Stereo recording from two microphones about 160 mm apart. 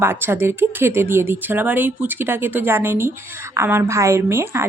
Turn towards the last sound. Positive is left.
turn(degrees=-15)  # may be behind; listen again after turning